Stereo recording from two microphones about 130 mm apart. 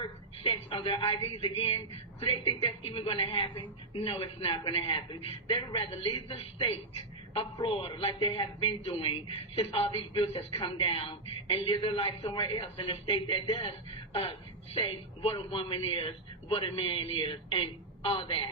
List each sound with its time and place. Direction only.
0.0 s a woman's voice: 45° left (ahead or behind)